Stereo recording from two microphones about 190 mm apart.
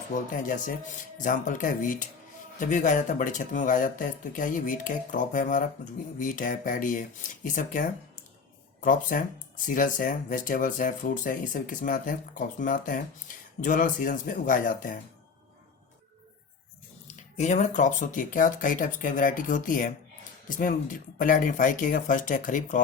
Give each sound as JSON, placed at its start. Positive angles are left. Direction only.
{"t": 0.1, "sound": "speech", "side_deg": 45}
{"t": 17.3, "sound": "speech", "side_deg": 35}